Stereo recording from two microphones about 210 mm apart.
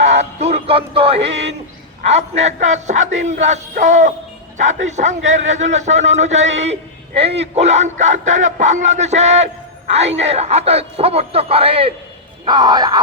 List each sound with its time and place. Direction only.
0.2 s music: 30° right (ahead or behind)
2.0 s a man's voice: 30° right (ahead or behind)